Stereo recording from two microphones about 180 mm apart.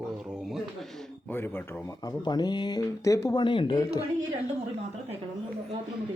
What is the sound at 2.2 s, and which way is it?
Speech, 25° left (ahead or behind).